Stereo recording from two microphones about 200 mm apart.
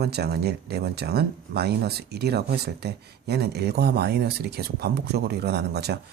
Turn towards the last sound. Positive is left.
turn(degrees=-55)  # may be behind; listen again after turning